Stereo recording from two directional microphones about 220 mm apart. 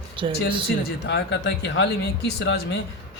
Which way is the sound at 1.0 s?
50° left (ahead or behind).